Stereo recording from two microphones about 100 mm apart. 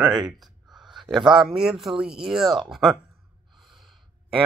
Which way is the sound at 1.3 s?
5° right (ahead or behind).